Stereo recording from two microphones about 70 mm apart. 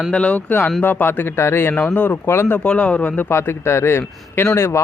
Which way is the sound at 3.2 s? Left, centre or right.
Left.